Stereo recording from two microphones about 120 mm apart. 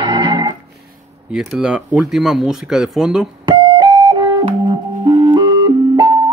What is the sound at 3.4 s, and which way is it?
Music, 40° right (ahead or behind).